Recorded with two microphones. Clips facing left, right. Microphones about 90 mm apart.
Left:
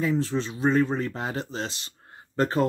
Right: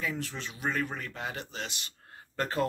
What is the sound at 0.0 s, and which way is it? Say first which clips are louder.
Speech: left 10 dB; 30° left (ahead or behind).